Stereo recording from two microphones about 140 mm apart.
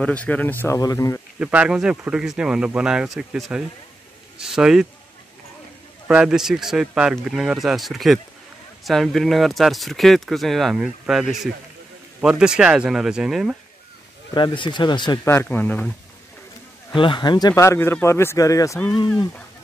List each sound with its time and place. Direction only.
0.0 s speech: 10° left (ahead or behind)
0.7 s speech: 25° left (ahead or behind)
1.4 s speech: 10° right (ahead or behind)
6.0 s speech: 5° right (ahead or behind)
14.3 s speech: 35° left (ahead or behind)
15.2 s speech: 15° left (ahead or behind)
16.9 s speech: 35° left (ahead or behind)
19.0 s speech: 10° left (ahead or behind)